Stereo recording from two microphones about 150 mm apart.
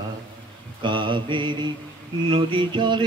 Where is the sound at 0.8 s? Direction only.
30° right (ahead or behind).